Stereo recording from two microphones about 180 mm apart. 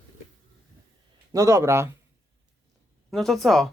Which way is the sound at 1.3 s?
15° right (ahead or behind).